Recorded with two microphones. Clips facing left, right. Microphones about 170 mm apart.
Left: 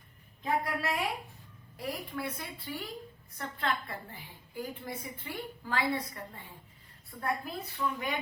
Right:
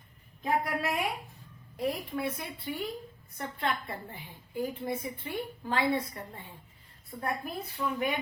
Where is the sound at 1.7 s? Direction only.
20° right (ahead or behind).